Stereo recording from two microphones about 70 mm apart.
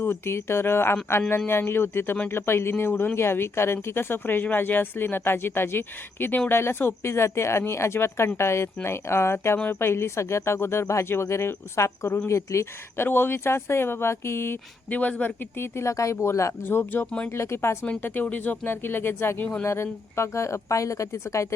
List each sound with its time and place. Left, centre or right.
0.0 s speech: left
13.1 s speech: left
14.8 s speech: left
15.5 s speech: left
16.6 s speech: left
17.1 s speech: centre
17.3 s speech: left
18.0 s speech: left